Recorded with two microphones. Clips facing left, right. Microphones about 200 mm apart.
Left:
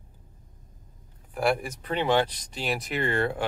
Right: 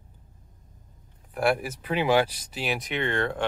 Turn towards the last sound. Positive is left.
turn(degrees=10)  # may be behind; listen again after turning